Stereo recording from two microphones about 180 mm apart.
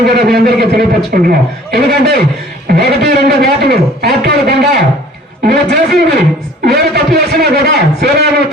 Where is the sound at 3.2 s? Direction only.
60° right (ahead or behind).